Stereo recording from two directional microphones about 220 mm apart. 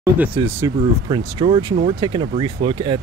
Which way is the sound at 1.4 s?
25° right (ahead or behind).